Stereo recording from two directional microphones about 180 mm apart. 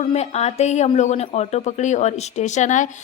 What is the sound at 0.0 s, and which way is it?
Speech, 35° left (ahead or behind).